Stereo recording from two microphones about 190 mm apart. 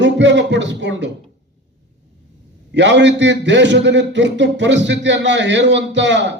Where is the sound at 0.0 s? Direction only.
70° right (ahead or behind).